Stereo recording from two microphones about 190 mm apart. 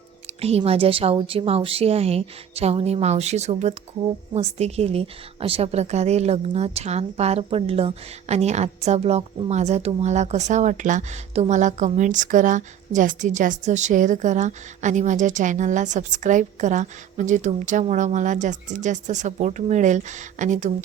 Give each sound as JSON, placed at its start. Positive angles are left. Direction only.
{"t": 0.4, "sound": "a woman's voice", "side_deg": -30}